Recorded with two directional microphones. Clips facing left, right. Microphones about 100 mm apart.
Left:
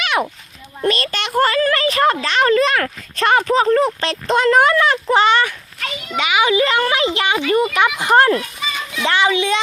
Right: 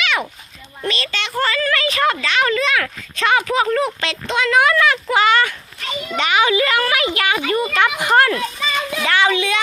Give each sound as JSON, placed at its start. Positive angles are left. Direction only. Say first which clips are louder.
{"t": 0.8, "sound": "a child's voice", "louder": "left 4 dB", "side_deg": 45}
{"t": 6.1, "sound": "a child's voice", "louder": "even", "side_deg": 10}
{"t": 6.5, "sound": "a child's voice", "louder": "left 1 dB", "side_deg": 25}